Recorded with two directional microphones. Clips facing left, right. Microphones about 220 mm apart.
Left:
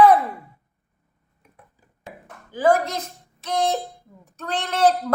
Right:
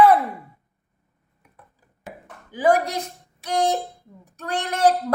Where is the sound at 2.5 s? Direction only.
15° right (ahead or behind).